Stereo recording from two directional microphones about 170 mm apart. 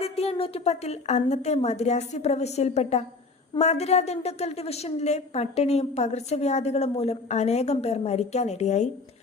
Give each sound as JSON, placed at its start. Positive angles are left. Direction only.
{"t": 0.0, "sound": "a woman's voice", "side_deg": 35}